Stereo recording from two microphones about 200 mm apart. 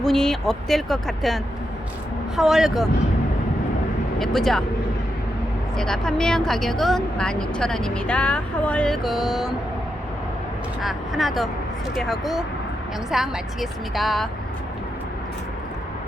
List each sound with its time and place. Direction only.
0.0 s speech: centre (ahead or behind)
4.2 s speech: centre (ahead or behind)
5.7 s speech: 5° left (ahead or behind)
10.8 s speech: centre (ahead or behind)